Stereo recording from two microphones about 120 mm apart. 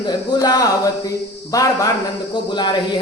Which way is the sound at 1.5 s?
30° left (ahead or behind).